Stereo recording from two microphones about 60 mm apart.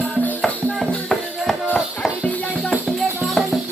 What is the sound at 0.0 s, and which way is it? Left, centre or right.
Music, left.